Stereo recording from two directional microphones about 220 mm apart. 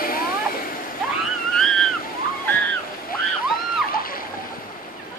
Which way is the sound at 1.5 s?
Centre (ahead or behind).